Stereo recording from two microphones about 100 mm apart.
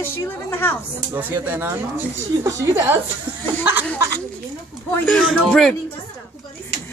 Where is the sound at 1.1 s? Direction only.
20° right (ahead or behind).